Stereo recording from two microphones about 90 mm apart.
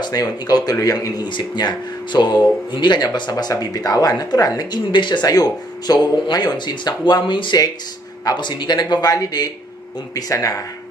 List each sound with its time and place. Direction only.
0.0 s speech: 45° left (ahead or behind)
1.3 s speech: 55° left (ahead or behind)
4.9 s speech: 60° left (ahead or behind); by 10.6 s 40° left (ahead or behind)